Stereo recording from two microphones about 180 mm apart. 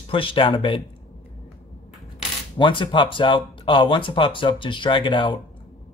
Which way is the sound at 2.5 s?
25° left (ahead or behind).